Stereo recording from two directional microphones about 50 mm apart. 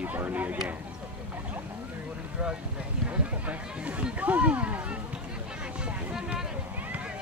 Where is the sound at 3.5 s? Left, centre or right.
Right.